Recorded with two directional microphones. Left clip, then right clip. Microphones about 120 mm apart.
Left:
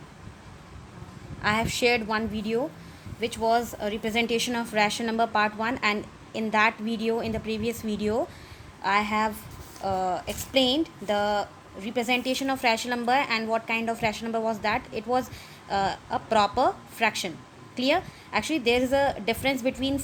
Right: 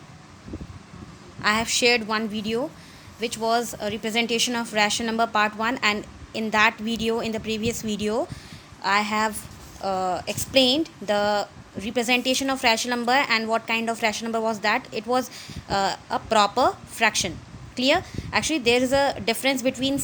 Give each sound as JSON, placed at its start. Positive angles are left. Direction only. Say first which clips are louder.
{"t": 1.4, "sound": "speech", "louder": "right 3 dB", "side_deg": -15}
{"t": 9.8, "sound": "speech", "louder": "right 2 dB", "side_deg": -25}